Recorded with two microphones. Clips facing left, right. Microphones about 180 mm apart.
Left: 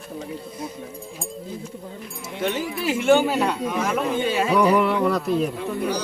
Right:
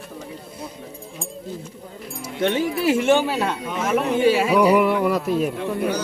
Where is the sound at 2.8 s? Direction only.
Centre (ahead or behind).